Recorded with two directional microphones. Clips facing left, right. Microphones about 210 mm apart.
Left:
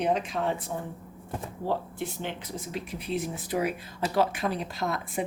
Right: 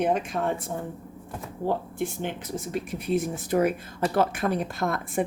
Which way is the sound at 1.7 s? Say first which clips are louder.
Right 3 dB; 50° right (ahead or behind).